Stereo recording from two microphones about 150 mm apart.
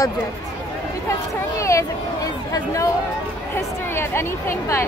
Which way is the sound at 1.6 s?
20° left (ahead or behind).